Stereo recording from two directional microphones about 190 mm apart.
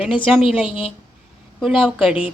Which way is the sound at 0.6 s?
30° left (ahead or behind).